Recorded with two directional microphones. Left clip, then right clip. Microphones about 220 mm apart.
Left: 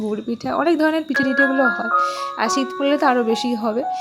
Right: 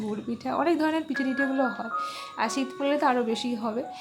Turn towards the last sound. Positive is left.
turn(degrees=25)  # may be behind; listen again after turning